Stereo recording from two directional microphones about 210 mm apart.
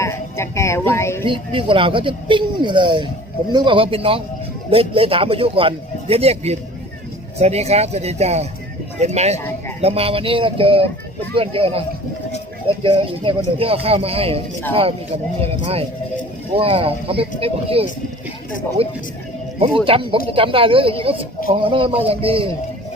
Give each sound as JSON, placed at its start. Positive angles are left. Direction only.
{"t": 0.0, "sound": "speech", "side_deg": 15}
{"t": 1.2, "sound": "speech", "side_deg": -25}
{"t": 9.4, "sound": "speech", "side_deg": 10}
{"t": 9.8, "sound": "speech", "side_deg": -25}